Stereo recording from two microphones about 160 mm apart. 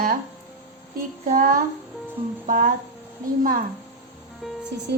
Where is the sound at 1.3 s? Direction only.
60° right (ahead or behind).